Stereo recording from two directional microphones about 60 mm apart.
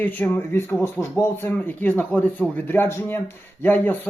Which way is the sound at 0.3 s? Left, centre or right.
Left.